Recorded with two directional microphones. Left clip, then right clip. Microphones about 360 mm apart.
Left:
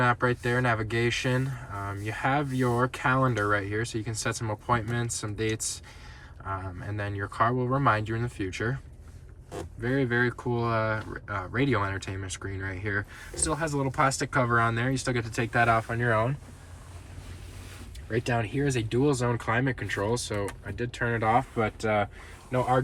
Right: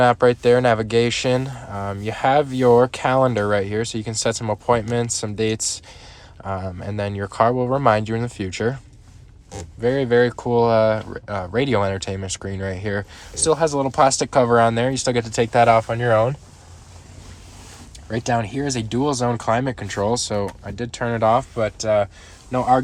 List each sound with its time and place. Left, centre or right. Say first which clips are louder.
0.0 s speech: right 11 dB; centre
6.8 s speech: right 9 dB; centre
9.8 s speech: right 10 dB; centre
18.1 s speech: right 7 dB; centre